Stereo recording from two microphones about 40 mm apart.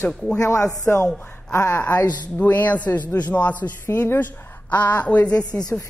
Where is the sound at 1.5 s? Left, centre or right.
Left.